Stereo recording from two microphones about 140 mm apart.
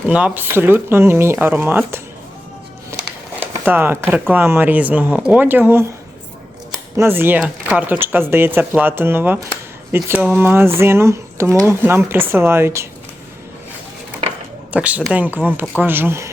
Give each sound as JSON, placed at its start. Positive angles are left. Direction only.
{"t": 0.1, "sound": "speech", "side_deg": -10}
{"t": 3.5, "sound": "speech", "side_deg": -15}
{"t": 6.9, "sound": "speech", "side_deg": -20}
{"t": 14.7, "sound": "speech", "side_deg": -10}